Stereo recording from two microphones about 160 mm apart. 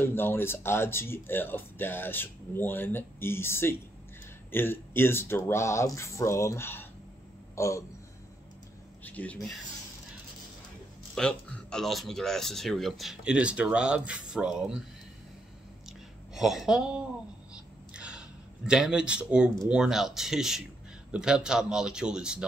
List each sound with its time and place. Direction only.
0.0 s speech: 15° left (ahead or behind)
7.5 s a sound: 20° left (ahead or behind)
9.0 s speech: 10° left (ahead or behind)
11.1 s speech: 5° left (ahead or behind)
16.3 s speech: centre (ahead or behind)
17.9 s a sound: 5° right (ahead or behind)
18.7 s speech: 5° right (ahead or behind)